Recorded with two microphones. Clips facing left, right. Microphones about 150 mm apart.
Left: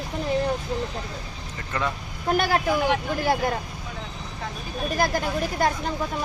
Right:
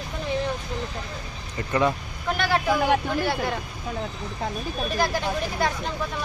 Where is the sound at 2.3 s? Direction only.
40° left (ahead or behind).